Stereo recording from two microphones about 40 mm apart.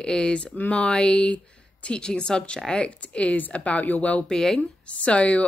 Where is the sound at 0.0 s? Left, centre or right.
Left.